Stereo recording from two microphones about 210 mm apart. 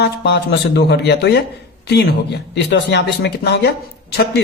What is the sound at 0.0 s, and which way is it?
Speech, 55° left (ahead or behind).